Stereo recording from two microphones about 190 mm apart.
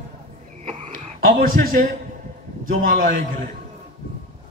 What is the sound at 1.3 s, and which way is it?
Speech, 50° right (ahead or behind).